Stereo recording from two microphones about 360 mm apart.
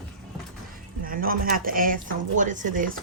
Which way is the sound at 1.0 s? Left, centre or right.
Right.